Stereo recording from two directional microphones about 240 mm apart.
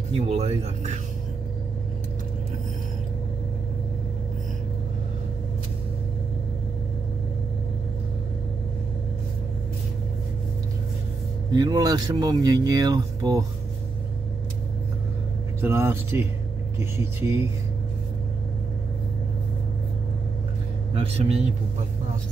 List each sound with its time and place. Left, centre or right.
0.1 s speech: right
11.5 s speech: centre
15.6 s speech: centre
20.9 s speech: right